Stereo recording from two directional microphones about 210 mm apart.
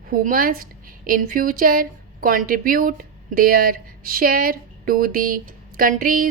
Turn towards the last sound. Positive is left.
turn(degrees=-40)  # may be behind; listen again after turning